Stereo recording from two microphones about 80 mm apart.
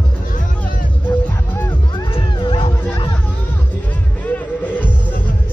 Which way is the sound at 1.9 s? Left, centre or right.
Left.